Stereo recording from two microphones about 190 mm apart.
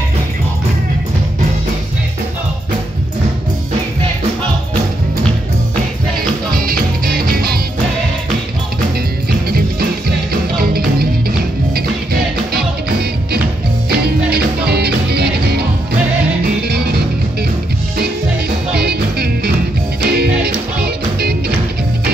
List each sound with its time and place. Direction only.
6.5 s music: 50° right (ahead or behind)
9.5 s music: 55° right (ahead or behind)
13.8 s music: 55° right (ahead or behind)
16.6 s music: 55° right (ahead or behind)
18.8 s music: 55° right (ahead or behind)